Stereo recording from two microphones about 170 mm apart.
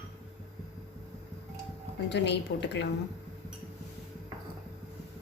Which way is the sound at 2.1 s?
90° left.